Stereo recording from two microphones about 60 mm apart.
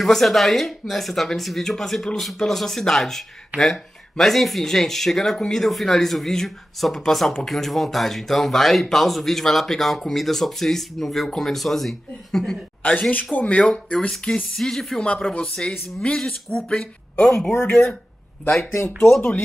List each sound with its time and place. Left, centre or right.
0.0 s speech: centre
13.1 s speech: left
13.9 s speech: centre
17.6 s speech: left
18.6 s speech: left